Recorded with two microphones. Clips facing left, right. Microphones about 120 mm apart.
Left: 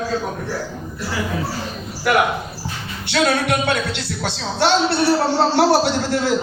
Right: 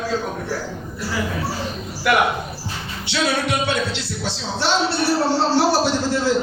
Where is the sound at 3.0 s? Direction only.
55° left (ahead or behind).